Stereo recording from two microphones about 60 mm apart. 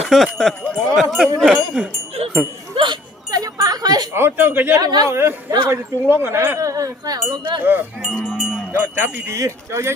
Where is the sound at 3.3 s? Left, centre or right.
Right.